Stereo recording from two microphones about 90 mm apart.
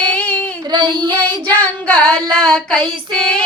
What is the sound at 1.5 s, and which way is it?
Child singing, 20° left (ahead or behind).